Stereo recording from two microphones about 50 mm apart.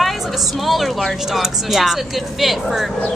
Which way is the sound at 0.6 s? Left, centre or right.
Centre.